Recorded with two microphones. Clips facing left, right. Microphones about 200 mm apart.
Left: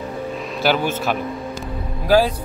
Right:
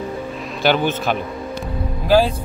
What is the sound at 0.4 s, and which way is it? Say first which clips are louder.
Speech: right 2 dB; centre (ahead or behind).